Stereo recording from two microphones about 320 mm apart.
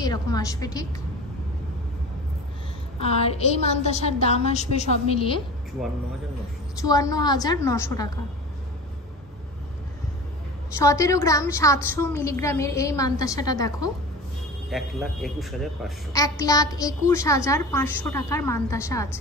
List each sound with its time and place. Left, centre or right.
0.0 s a woman's voice: centre
3.0 s a woman's voice: centre
5.8 s speech: centre
6.8 s a woman's voice: centre
10.8 s a woman's voice: centre
14.7 s speech: centre
16.1 s a woman's voice: centre